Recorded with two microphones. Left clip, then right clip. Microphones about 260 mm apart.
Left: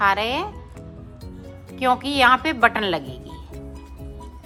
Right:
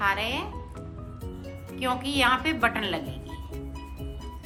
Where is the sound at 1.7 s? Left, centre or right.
Centre.